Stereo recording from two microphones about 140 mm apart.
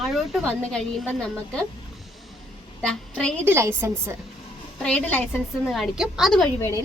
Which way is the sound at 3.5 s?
20° right (ahead or behind).